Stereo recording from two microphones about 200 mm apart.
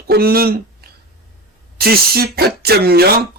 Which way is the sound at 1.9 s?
50° right (ahead or behind).